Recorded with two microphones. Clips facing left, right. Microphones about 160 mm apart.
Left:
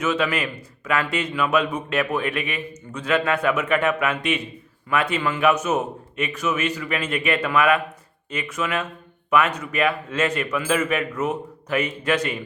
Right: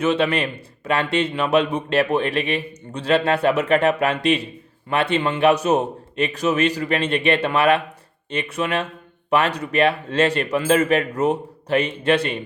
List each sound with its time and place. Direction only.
0.0 s a man's voice: 30° right (ahead or behind)